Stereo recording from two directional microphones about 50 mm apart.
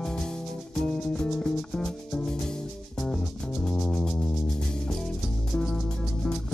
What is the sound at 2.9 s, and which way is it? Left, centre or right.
Music, centre.